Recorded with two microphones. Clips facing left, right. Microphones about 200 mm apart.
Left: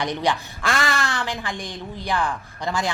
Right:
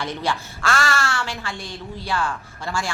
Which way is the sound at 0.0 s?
15° left (ahead or behind).